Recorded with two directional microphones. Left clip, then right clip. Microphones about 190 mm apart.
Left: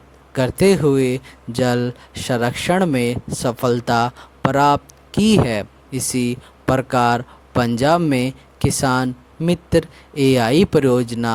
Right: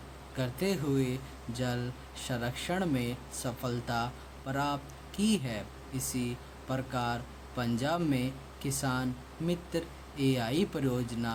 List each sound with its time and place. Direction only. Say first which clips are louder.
0.3 s speech: left 18 dB; 55° left (ahead or behind)